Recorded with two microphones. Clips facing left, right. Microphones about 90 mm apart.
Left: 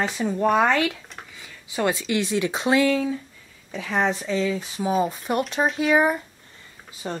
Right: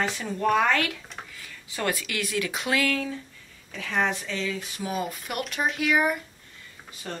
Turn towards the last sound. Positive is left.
turn(degrees=25)  # may be behind; listen again after turning